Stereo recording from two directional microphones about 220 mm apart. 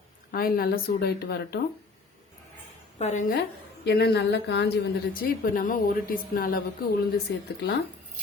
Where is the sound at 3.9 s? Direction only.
50° left (ahead or behind).